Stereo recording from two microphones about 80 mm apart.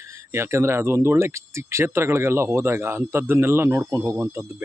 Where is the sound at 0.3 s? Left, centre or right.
Right.